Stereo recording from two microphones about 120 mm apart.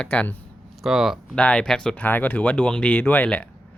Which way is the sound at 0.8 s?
5° right (ahead or behind).